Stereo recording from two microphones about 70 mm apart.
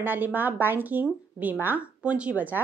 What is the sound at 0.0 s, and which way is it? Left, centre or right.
A woman's voice, right.